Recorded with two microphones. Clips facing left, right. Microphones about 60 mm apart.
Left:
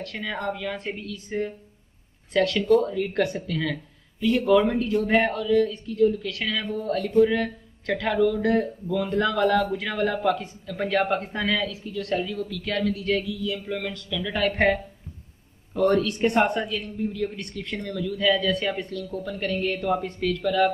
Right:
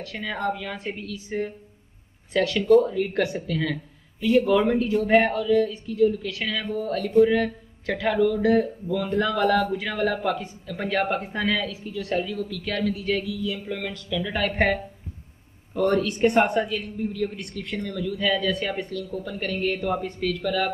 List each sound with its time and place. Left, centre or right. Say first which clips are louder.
0.0 s speech: right 1 dB; centre
5.3 s speech: even; centre
15.8 s speech: even; centre
17.8 s speech: left 2 dB; centre